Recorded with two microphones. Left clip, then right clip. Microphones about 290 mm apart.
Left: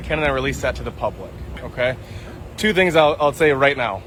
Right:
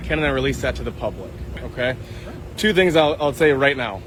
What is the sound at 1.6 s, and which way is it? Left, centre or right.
Boat, centre.